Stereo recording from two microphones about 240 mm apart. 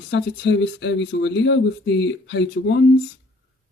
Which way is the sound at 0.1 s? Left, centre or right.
Left.